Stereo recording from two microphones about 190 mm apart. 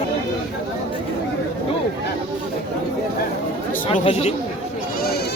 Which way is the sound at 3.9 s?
30° left (ahead or behind).